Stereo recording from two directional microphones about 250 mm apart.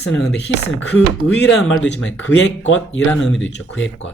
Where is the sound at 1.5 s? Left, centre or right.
Left.